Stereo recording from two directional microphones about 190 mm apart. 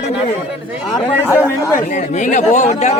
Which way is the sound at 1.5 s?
10° left (ahead or behind).